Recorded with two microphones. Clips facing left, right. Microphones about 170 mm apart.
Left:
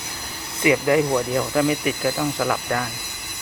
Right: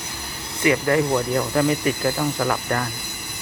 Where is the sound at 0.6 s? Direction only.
15° left (ahead or behind).